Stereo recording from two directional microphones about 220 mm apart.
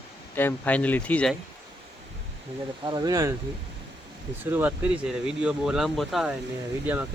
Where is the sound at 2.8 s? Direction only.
20° right (ahead or behind).